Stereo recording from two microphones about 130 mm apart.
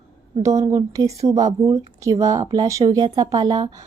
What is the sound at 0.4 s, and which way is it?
A woman's voice, 25° right (ahead or behind).